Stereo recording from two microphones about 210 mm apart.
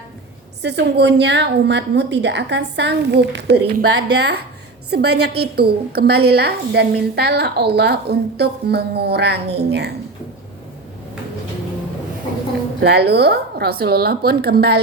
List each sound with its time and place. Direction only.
0.6 s a woman's voice: 55° right (ahead or behind)
12.8 s a woman's voice: 50° right (ahead or behind)